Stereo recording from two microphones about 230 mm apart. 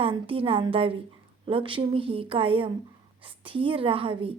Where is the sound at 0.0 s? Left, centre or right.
Right.